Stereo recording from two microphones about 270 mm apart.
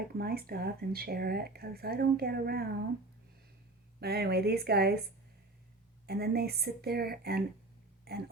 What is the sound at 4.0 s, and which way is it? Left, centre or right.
Speech, right.